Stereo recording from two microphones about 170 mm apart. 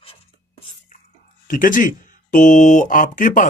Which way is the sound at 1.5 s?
50° left (ahead or behind).